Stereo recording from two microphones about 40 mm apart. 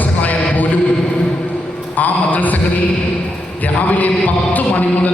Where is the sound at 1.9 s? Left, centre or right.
Left.